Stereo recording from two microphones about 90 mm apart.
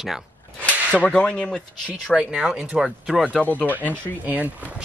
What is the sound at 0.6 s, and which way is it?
Speech, 10° left (ahead or behind).